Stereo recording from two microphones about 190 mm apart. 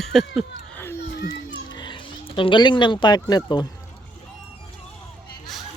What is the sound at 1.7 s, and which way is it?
Speech, 25° left (ahead or behind).